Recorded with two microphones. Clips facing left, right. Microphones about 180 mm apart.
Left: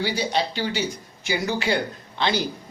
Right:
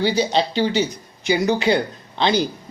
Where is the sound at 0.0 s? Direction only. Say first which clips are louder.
Right 5 dB; 25° right (ahead or behind).